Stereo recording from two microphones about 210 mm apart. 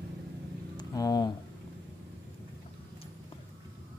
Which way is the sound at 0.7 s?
15° left (ahead or behind).